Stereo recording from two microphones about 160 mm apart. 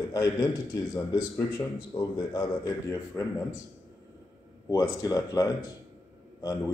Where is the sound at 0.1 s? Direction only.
20° left (ahead or behind).